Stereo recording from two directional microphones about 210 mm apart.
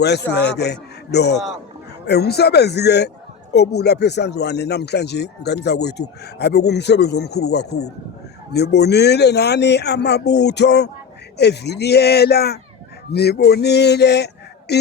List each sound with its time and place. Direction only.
0.0 s speech: 55° left (ahead or behind)